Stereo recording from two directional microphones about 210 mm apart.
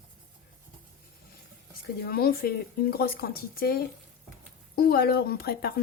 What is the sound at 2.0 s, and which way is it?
Speech, 45° left (ahead or behind).